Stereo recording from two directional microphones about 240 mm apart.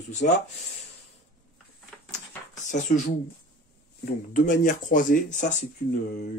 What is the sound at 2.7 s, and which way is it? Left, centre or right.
Speech, left.